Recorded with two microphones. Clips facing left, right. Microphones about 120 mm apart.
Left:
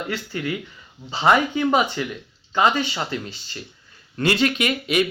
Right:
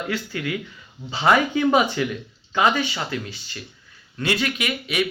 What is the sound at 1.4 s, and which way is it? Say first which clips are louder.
Speech: right 1 dB; 20° left (ahead or behind).